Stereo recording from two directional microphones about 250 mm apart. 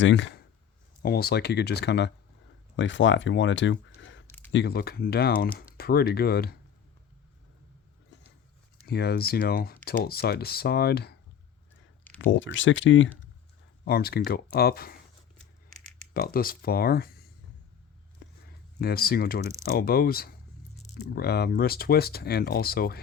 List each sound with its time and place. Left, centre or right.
0.0 s speech: left
4.3 s a sound: centre
4.5 s speech: left
8.9 s speech: left
12.2 s speech: left
16.1 s speech: left
18.2 s a sound: left
18.8 s speech: left